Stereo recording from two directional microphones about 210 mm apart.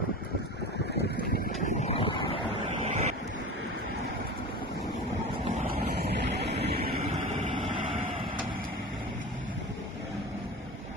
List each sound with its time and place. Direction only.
1.3 s vehicle: 35° left (ahead or behind)
2.8 s waves: 35° right (ahead or behind)
5.9 s vehicle: 55° right (ahead or behind)